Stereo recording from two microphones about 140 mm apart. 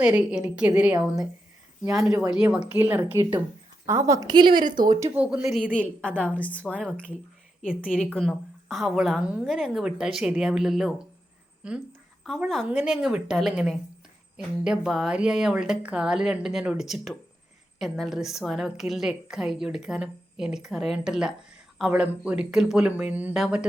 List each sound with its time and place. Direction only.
0.0 s speech: 5° right (ahead or behind)
1.8 s a woman's voice: 20° right (ahead or behind)
2.0 s a woman's voice: 5° right (ahead or behind); by 4.5 s 30° right (ahead or behind)
5.1 s speech: 10° right (ahead or behind)
6.0 s a woman's voice: 10° left (ahead or behind)
7.8 s a woman's voice: 10° left (ahead or behind)